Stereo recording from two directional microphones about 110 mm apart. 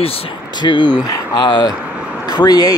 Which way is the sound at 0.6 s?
45° left (ahead or behind).